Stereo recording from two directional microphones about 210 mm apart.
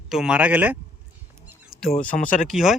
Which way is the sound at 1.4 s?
Centre (ahead or behind).